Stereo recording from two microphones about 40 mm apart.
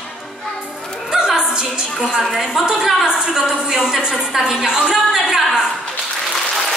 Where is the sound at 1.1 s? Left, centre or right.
Centre.